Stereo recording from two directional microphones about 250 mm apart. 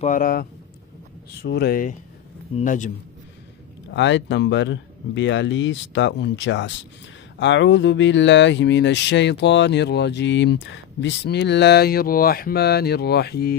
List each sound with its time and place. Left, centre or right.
0.0 s a man's voice: left
3.9 s speech: left